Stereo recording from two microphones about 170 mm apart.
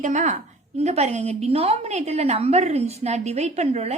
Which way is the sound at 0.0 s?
45° right (ahead or behind).